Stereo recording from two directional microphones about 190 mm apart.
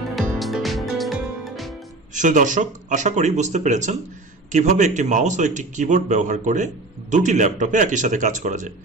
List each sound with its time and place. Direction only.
0.1 s music: centre (ahead or behind)
2.1 s speech: 40° right (ahead or behind)